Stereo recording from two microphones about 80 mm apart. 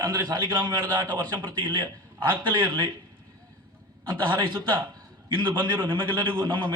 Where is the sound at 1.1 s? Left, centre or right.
Right.